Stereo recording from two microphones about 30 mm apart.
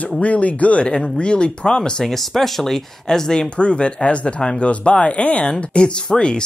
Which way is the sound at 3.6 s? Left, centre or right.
Left.